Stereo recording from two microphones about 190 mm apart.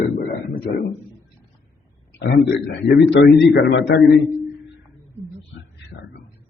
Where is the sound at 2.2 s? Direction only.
60° left (ahead or behind).